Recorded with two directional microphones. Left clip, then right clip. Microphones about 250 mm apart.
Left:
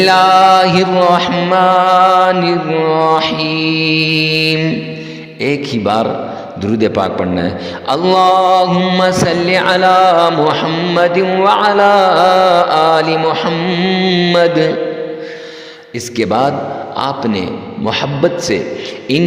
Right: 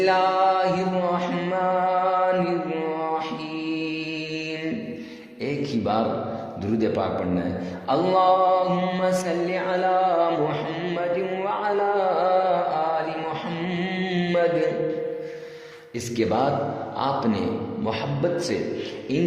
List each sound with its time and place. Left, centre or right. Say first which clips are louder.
0.0 s music: left 12 dB; left
5.4 s mantra: left 11 dB; left
16.1 s mantra: left 10 dB; left
17.0 s a man's voice: left 7 dB; left